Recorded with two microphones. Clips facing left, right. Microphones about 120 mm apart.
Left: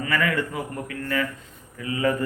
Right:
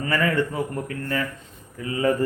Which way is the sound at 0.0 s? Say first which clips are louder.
Right 2 dB; 35° right (ahead or behind).